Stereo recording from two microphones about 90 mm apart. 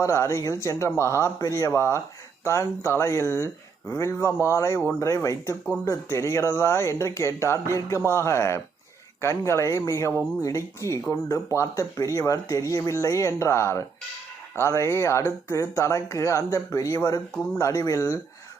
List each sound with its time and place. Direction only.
0.0 s speech: 35° left (ahead or behind)